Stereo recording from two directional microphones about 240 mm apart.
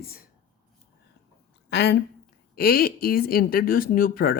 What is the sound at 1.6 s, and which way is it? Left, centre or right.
A woman's voice, left.